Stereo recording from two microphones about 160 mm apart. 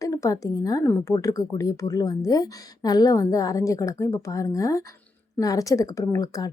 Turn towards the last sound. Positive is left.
turn(degrees=20)  # may be behind; listen again after turning